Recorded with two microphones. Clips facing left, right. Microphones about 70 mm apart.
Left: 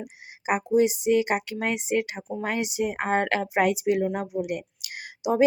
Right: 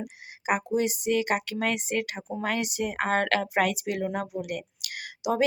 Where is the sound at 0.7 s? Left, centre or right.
Centre.